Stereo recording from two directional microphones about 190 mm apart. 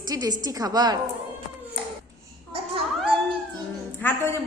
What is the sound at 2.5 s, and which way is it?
Babbling, 30° right (ahead or behind).